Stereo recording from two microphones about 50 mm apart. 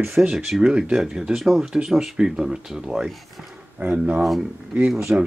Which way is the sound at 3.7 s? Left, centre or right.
Right.